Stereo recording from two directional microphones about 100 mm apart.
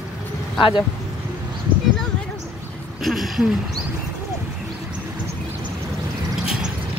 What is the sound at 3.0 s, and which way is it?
Speech, centre (ahead or behind).